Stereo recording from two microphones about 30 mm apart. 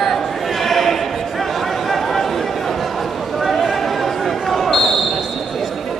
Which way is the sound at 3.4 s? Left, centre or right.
Centre.